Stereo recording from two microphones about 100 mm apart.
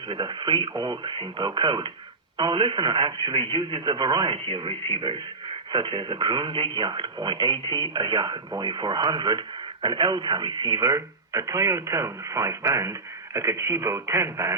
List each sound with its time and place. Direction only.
0.1 s speech: 50° right (ahead or behind); by 14.5 s 30° right (ahead or behind)